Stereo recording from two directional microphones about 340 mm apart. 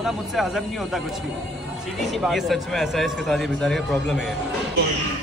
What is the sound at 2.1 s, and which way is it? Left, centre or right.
A man's voice, centre.